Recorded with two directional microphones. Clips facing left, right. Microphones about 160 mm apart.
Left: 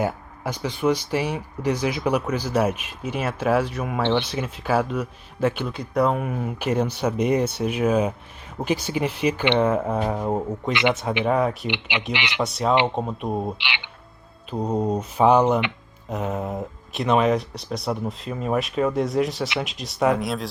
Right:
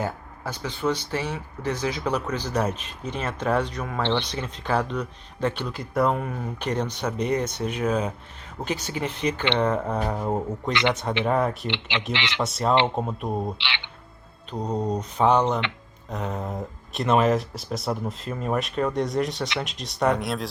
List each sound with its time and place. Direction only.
0.0 s speech: 10° left (ahead or behind)
11.7 s speech: 15° left (ahead or behind)
12.4 s speech: centre (ahead or behind)
13.6 s speech: 15° left (ahead or behind)